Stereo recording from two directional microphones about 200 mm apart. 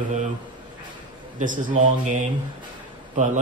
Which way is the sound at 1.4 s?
40° right (ahead or behind).